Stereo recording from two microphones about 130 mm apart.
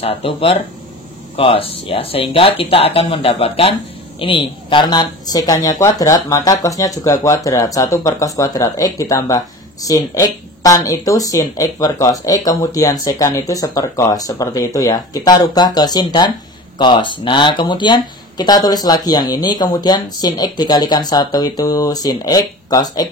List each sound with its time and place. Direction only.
0.0 s speech: 45° left (ahead or behind); by 23.0 s 30° left (ahead or behind)